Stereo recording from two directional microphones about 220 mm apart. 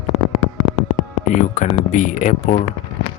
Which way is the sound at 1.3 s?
35° left (ahead or behind).